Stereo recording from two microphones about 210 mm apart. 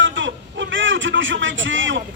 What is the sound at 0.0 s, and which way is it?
Speech, 60° right (ahead or behind).